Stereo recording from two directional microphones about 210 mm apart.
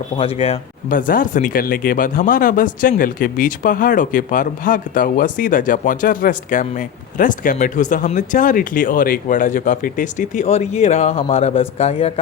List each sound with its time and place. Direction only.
0.2 s speech: 25° left (ahead or behind)